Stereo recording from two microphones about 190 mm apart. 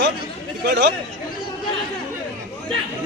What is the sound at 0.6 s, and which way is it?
Speech, 65° right (ahead or behind).